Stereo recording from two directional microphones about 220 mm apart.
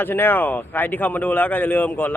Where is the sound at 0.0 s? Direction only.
10° left (ahead or behind).